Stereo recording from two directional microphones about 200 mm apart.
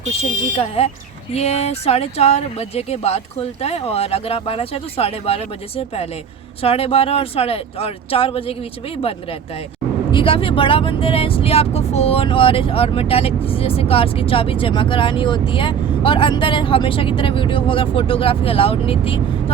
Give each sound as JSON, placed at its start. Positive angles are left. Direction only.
{"t": 0.5, "sound": "speech", "side_deg": 30}
{"t": 10.1, "sound": "speech", "side_deg": 25}